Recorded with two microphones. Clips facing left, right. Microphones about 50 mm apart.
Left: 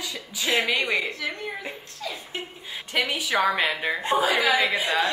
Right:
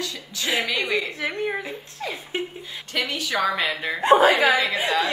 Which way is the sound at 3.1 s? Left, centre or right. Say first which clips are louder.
Even; centre.